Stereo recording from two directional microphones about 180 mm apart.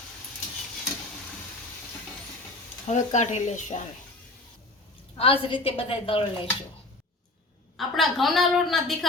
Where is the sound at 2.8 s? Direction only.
40° left (ahead or behind).